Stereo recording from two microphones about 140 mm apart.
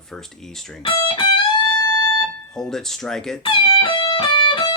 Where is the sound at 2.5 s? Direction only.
5° left (ahead or behind).